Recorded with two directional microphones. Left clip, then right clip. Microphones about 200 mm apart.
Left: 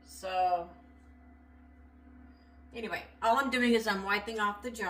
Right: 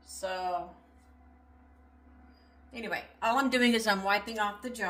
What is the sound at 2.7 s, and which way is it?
A woman's voice, 40° right (ahead or behind).